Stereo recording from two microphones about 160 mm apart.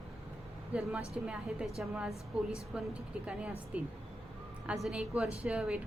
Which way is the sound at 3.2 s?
5° right (ahead or behind).